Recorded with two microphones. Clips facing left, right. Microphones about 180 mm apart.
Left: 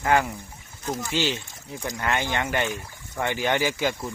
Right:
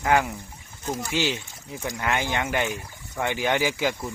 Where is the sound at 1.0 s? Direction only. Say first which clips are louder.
Even; 15° right (ahead or behind).